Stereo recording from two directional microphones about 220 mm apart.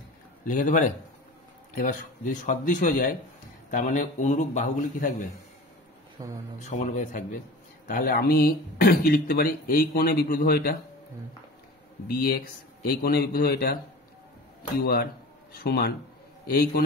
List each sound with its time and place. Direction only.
0.5 s speech: 35° left (ahead or behind)
6.2 s speech: 15° right (ahead or behind)
6.6 s speech: 35° left (ahead or behind)
12.1 s speech: 45° left (ahead or behind)
15.6 s speech: 45° left (ahead or behind)